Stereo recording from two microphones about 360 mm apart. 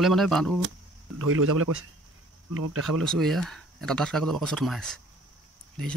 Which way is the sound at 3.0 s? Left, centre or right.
Centre.